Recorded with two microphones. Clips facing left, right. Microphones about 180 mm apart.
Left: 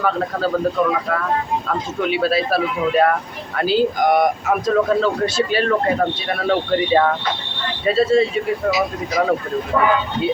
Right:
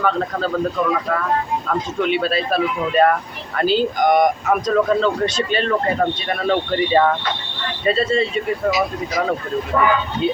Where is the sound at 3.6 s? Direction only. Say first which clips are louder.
Even; 5° left (ahead or behind).